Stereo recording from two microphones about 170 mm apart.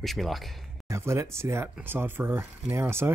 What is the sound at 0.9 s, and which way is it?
Speech, 15° right (ahead or behind).